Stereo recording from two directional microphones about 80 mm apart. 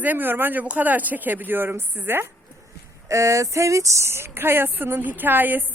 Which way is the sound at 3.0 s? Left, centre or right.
Right.